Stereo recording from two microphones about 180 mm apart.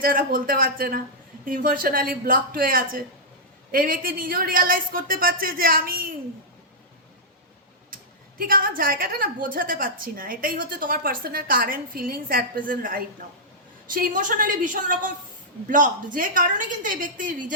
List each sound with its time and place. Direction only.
0.0 s a woman's voice: 55° right (ahead or behind)
8.4 s a woman's voice: 50° right (ahead or behind)